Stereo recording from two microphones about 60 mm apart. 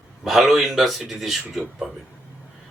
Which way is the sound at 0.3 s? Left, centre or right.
Centre.